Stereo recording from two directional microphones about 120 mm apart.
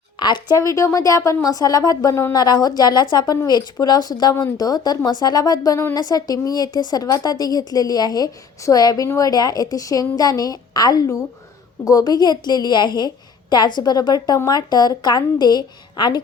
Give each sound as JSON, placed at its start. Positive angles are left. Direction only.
{"t": 0.2, "sound": "speech", "side_deg": 40}
{"t": 0.5, "sound": "speech", "side_deg": 25}